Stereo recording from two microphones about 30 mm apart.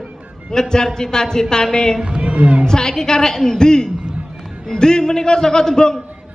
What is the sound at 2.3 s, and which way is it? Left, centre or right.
Speech, right.